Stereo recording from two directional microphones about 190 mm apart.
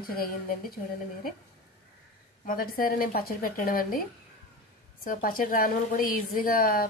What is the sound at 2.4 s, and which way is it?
A woman's voice, 50° left (ahead or behind).